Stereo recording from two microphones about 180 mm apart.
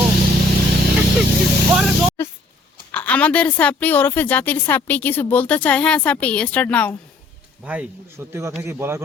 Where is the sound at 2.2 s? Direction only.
15° left (ahead or behind).